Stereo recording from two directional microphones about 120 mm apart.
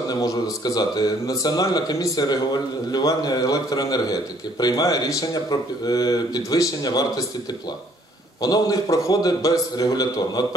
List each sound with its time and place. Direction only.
0.1 s a man's voice: 35° left (ahead or behind)
8.4 s a man's voice: 30° left (ahead or behind)